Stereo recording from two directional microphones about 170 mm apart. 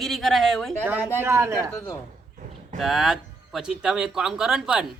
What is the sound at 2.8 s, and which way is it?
A man's voice, centre (ahead or behind).